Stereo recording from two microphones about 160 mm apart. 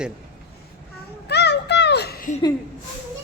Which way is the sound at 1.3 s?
90° left.